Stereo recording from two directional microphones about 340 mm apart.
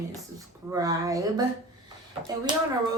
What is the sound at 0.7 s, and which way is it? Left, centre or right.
Speech, centre.